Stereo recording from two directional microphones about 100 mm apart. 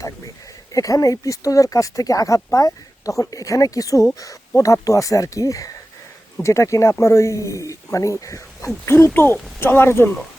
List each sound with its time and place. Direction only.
0.7 s speech: 35° left (ahead or behind)